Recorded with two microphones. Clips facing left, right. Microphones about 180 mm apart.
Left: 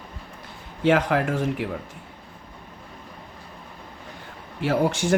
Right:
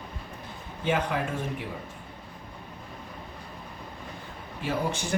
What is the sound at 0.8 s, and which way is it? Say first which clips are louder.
Speech: left 7 dB; 80° left.